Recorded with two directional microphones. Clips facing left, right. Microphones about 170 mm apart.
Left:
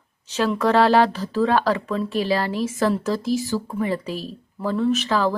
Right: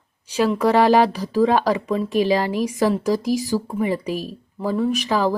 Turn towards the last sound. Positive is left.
turn(degrees=-15)  # may be behind; listen again after turning